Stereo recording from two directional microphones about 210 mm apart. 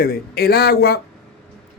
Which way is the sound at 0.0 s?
45° left (ahead or behind).